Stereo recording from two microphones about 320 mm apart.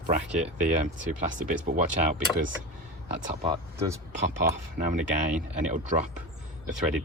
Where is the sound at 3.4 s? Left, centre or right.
Centre.